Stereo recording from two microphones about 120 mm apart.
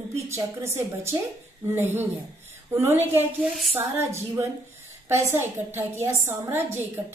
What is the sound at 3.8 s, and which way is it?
A woman's voice, 20° right (ahead or behind).